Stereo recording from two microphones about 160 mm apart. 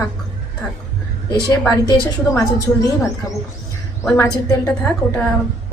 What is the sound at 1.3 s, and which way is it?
A woman's voice, 25° left (ahead or behind).